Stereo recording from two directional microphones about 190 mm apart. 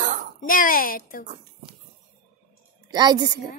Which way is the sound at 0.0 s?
45° right (ahead or behind).